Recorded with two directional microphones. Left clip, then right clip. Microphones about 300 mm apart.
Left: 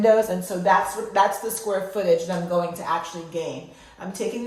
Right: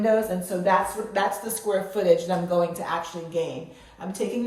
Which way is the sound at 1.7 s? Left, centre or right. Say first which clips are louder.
Right 1 dB; centre.